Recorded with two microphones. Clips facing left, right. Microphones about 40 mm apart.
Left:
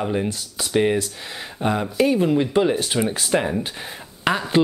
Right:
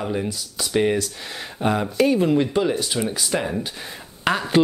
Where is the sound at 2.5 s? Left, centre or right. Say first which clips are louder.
Left 2 dB; left.